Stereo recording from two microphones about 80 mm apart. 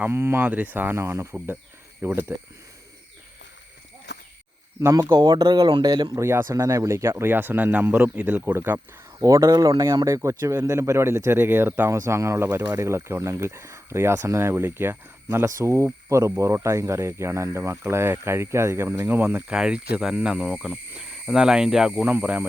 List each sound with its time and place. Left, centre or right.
0.0 s speech: right
4.8 s speech: right
5.1 s speech: right
6.1 s speech: right; by 8.4 s centre
8.4 s speech: right
9.1 s speech: right
11.9 s speech: right
15.4 s speech: right
19.5 s speech: centre
22.2 s speech: centre